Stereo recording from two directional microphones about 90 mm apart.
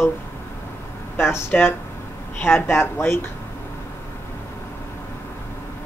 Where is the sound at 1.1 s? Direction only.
30° left (ahead or behind).